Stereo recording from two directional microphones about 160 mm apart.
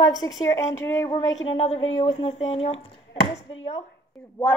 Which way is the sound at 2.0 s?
35° left (ahead or behind).